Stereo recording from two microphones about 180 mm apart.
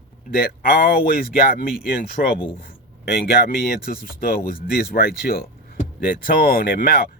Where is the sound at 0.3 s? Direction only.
55° left (ahead or behind).